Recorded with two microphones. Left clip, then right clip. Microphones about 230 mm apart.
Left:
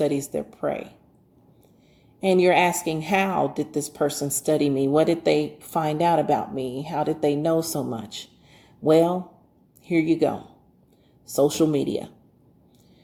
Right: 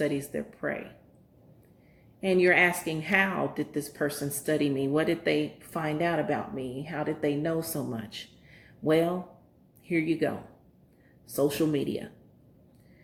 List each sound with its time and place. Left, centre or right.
0.0 s a woman's voice: left
2.2 s a woman's voice: left
11.3 s a woman's voice: left